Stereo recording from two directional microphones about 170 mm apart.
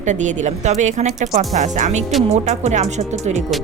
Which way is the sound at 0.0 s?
45° right (ahead or behind).